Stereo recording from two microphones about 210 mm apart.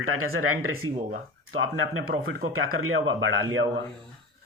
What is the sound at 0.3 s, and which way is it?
Speech, 90° right.